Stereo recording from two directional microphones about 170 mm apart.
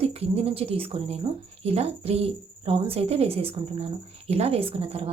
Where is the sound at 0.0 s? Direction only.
35° right (ahead or behind).